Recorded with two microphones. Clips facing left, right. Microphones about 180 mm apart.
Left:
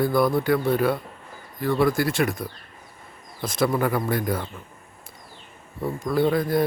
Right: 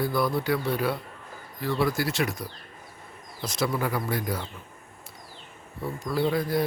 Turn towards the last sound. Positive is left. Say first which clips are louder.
# left 4 dB
turn(degrees=50)  # may be behind; listen again after turning